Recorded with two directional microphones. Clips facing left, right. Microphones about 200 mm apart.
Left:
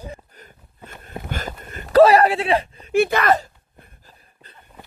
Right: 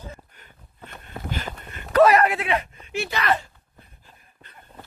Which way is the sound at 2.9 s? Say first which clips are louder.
Left 7 dB; 55° left (ahead or behind).